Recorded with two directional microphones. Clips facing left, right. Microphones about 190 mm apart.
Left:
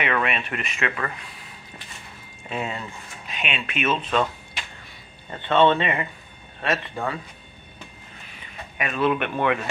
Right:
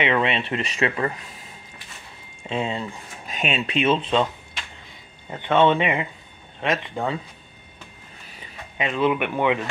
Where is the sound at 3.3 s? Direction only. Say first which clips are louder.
Right 5 dB; 40° right (ahead or behind); by 4.3 s 25° right (ahead or behind).